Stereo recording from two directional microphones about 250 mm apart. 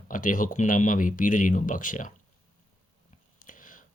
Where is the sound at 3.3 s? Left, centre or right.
Left.